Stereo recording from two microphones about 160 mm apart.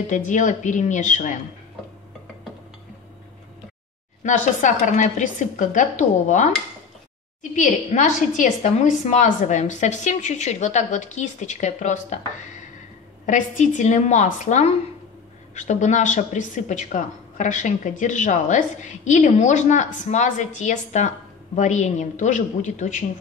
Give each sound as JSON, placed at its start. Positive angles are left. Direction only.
{"t": 0.0, "sound": "speech", "side_deg": 50}
{"t": 4.2, "sound": "speech", "side_deg": 50}
{"t": 7.5, "sound": "speech", "side_deg": 50}